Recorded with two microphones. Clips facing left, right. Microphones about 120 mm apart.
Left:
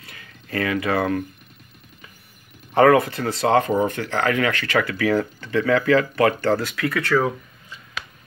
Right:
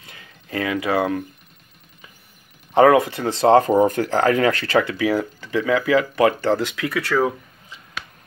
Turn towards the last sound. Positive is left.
turn(degrees=-5)  # may be behind; listen again after turning